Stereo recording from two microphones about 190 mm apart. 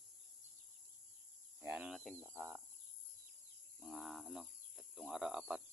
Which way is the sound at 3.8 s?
Centre (ahead or behind).